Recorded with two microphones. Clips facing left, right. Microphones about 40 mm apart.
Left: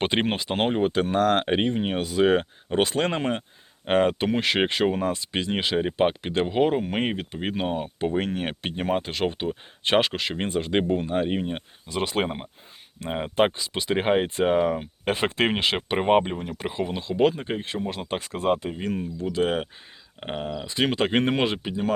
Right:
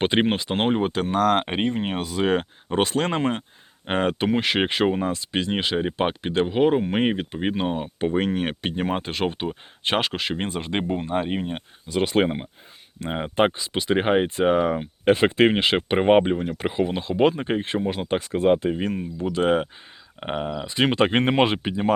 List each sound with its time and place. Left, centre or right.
0.0 s speech: centre
0.6 s speech: centre
2.0 s speech: centre
2.4 s speech: centre
3.8 s speech: centre
10.8 s speech: right
11.1 s speech: centre; by 17.8 s right
17.8 s speech: centre
18.6 s speech: right